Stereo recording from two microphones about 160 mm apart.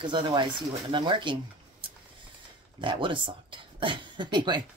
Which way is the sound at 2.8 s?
30° right (ahead or behind).